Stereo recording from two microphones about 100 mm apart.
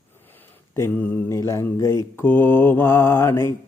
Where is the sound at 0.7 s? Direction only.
20° left (ahead or behind).